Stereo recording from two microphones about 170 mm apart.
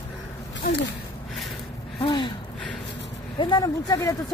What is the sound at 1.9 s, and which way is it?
Gasp, 30° left (ahead or behind).